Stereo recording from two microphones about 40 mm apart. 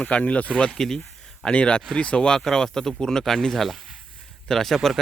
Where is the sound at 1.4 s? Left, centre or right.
Left.